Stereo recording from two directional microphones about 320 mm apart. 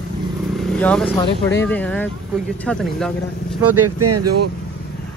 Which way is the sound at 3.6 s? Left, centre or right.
Right.